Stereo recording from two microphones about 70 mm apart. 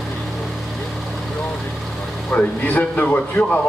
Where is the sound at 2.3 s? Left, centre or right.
Left.